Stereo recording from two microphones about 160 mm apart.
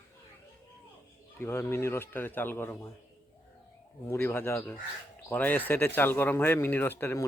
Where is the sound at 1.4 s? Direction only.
15° left (ahead or behind).